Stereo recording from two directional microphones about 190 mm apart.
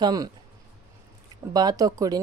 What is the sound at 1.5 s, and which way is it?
Speech, 20° right (ahead or behind).